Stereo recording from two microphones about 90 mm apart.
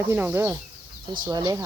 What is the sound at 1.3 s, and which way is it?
Speech, 50° right (ahead or behind).